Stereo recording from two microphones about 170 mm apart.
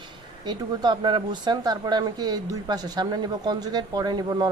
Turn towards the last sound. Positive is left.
turn(degrees=-25)  # may be behind; listen again after turning